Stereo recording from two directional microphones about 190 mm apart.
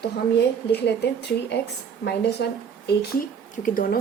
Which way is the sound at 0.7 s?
60° left (ahead or behind).